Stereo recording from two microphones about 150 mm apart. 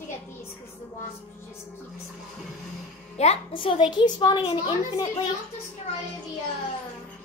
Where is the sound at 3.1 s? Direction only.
45° left (ahead or behind).